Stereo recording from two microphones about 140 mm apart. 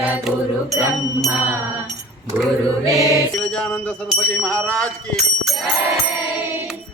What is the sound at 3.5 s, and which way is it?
Mantra, 5° left (ahead or behind).